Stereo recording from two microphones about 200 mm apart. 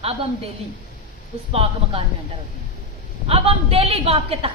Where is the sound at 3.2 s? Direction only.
30° right (ahead or behind).